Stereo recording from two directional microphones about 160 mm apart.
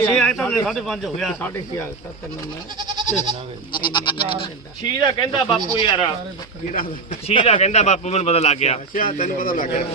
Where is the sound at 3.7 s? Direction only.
30° left (ahead or behind).